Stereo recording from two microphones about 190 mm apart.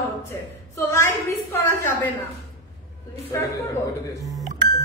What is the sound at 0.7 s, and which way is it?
Speech, 15° left (ahead or behind).